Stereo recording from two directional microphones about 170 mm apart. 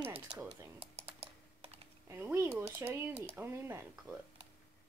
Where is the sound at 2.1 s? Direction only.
15° right (ahead or behind).